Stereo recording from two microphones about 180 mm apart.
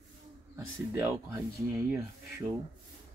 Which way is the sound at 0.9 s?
15° right (ahead or behind).